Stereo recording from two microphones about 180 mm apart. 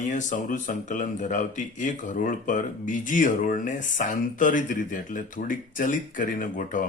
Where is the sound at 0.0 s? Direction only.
45° left (ahead or behind).